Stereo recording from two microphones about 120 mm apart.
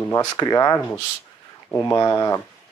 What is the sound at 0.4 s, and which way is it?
Speech, 30° left (ahead or behind).